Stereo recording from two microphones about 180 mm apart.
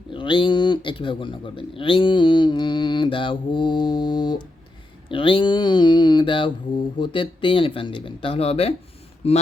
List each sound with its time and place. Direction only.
0.1 s speech: 25° left (ahead or behind)